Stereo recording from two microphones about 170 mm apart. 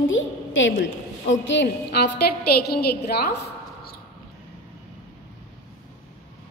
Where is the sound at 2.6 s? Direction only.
70° left (ahead or behind).